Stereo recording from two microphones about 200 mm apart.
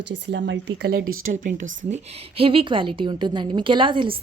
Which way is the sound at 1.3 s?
40° right (ahead or behind).